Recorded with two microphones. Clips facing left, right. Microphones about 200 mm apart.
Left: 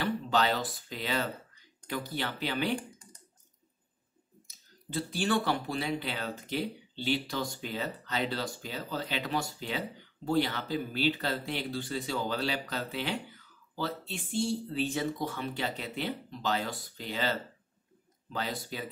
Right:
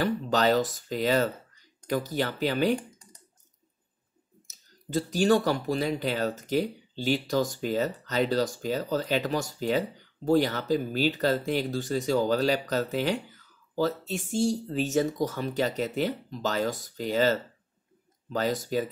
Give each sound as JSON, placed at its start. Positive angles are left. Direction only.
{"t": 0.0, "sound": "speech", "side_deg": -45}
{"t": 4.8, "sound": "speech", "side_deg": -40}